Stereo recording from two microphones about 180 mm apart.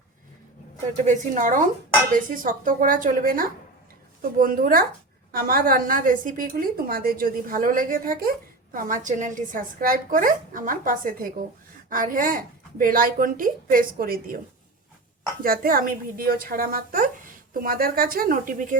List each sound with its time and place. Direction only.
1.0 s a woman's voice: 45° right (ahead or behind)
15.4 s a woman's voice: 55° right (ahead or behind)